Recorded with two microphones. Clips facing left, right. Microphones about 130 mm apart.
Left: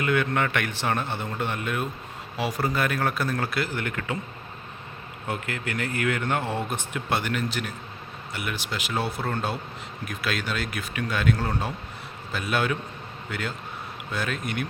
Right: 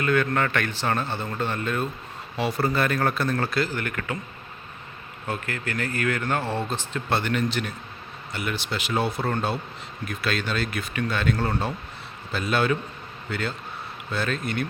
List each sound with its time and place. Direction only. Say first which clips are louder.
0.0 s speech: right 1 dB; 15° left (ahead or behind)
3.7 s speech: even; 20° left (ahead or behind)
5.3 s speech: right 1 dB; 15° left (ahead or behind)
14.1 s speech: right 2 dB; 10° left (ahead or behind)